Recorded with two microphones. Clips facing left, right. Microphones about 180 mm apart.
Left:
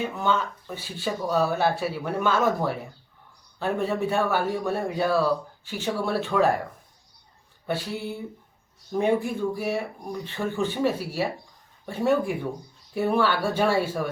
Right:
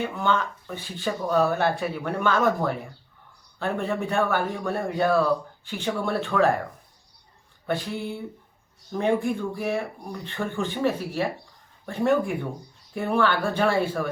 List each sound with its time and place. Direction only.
0.0 s speech: 10° left (ahead or behind)
8.9 s speech: 10° left (ahead or behind)